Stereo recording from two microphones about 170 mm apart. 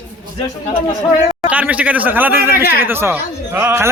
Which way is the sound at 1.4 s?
10° right (ahead or behind).